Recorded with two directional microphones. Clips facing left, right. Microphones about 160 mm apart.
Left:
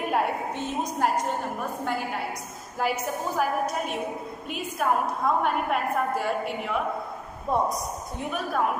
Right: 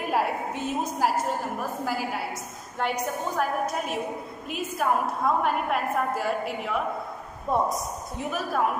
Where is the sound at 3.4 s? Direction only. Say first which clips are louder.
Left 1 dB; centre (ahead or behind).